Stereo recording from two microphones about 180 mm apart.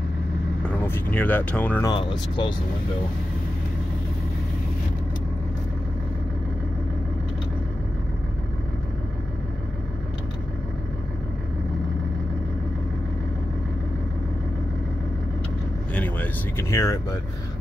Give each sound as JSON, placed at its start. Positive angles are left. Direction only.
{"t": 0.7, "sound": "speech", "side_deg": 10}
{"t": 1.9, "sound": "speech", "side_deg": 25}
{"t": 15.9, "sound": "vehicle", "side_deg": 10}